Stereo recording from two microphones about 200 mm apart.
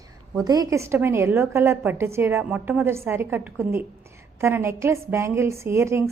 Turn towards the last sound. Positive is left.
turn(degrees=-15)  # may be behind; listen again after turning